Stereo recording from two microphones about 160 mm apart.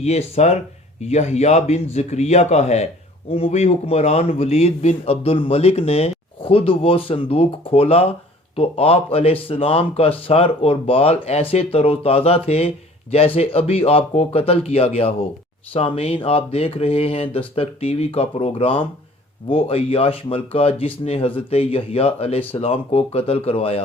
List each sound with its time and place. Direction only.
0.0 s a man's voice: 45° left (ahead or behind)